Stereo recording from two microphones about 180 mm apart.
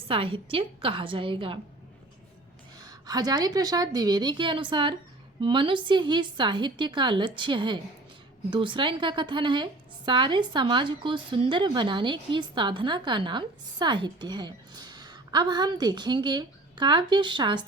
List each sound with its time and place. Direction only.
0.1 s speech: 30° right (ahead or behind)
2.7 s speech: 20° right (ahead or behind)